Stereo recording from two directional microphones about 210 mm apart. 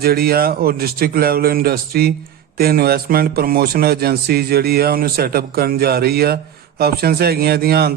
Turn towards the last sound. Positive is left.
turn(degrees=-45)  # may be behind; listen again after turning